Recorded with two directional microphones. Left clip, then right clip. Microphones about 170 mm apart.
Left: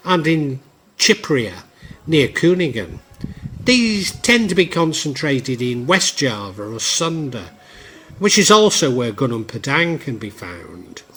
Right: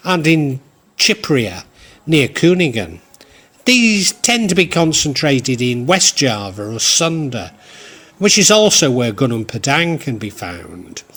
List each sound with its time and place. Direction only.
0.0 s a man's voice: 30° right (ahead or behind)